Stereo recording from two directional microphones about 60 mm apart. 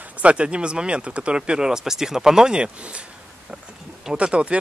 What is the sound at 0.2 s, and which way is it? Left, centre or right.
Speech, centre.